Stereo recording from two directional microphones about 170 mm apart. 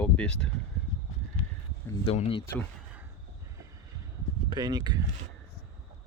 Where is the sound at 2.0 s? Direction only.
35° left (ahead or behind).